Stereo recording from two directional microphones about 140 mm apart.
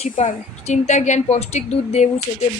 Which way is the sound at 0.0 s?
55° left (ahead or behind).